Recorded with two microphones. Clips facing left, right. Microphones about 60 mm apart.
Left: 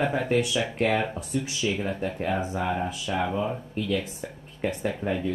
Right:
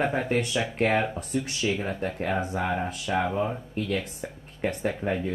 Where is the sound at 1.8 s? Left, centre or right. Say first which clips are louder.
Left 1 dB; right.